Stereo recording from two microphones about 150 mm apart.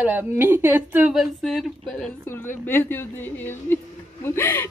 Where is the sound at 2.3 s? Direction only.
15° left (ahead or behind).